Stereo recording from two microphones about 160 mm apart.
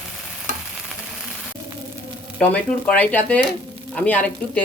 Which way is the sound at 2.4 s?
10° left (ahead or behind).